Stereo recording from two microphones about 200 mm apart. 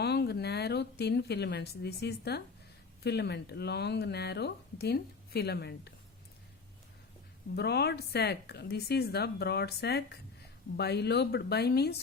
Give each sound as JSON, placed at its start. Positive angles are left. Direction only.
{"t": 0.0, "sound": "speech", "side_deg": 55}
{"t": 7.5, "sound": "speech", "side_deg": 55}